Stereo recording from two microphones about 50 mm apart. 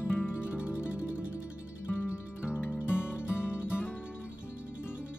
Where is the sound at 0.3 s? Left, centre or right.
Left.